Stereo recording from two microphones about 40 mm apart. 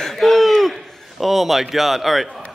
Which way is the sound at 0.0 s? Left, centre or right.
Centre.